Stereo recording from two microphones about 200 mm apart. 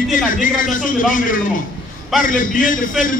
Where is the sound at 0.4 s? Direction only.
40° left (ahead or behind).